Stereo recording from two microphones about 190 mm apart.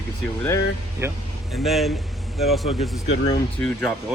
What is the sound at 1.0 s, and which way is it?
Speech, 15° right (ahead or behind).